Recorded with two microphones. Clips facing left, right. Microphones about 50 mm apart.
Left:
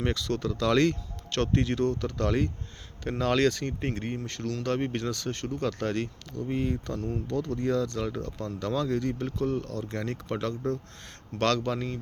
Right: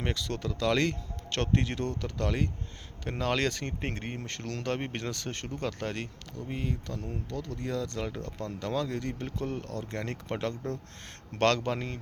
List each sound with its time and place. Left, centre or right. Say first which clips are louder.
0.0 s speech: left 4 dB; centre
3.4 s speech: left 5 dB; right
4.6 s speech: left 4 dB; right
5.6 s speech: left 5 dB; centre
6.5 s speech: left 5 dB; centre
8.2 s speech: left 2 dB; right
8.6 s speech: left 4 dB; centre; by 11.9 s right